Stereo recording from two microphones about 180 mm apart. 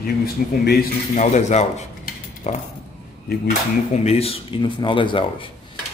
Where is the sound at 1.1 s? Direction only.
40° left (ahead or behind).